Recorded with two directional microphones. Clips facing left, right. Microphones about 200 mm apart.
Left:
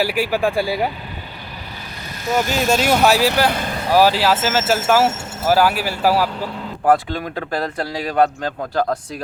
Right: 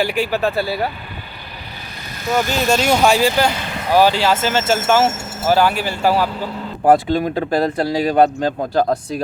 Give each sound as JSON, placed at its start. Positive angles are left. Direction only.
{"t": 0.0, "sound": "speech", "side_deg": 5}
{"t": 2.3, "sound": "speech", "side_deg": 5}
{"t": 6.8, "sound": "speech", "side_deg": -30}